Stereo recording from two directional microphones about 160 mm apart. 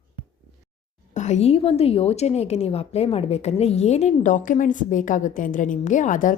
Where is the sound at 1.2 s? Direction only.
45° left (ahead or behind).